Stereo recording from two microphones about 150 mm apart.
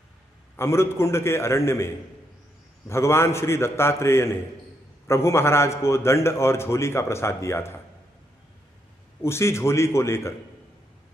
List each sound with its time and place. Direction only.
0.6 s a man's voice: 15° left (ahead or behind)
2.9 s a man's voice: 15° left (ahead or behind)
9.2 s a man's voice: 20° left (ahead or behind)